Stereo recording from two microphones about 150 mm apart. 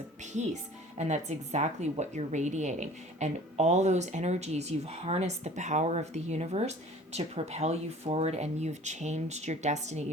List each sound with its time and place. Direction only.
0.9 s a woman's voice: 50° right (ahead or behind)